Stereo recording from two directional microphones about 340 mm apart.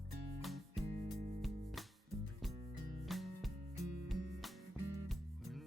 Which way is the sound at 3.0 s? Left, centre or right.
Centre.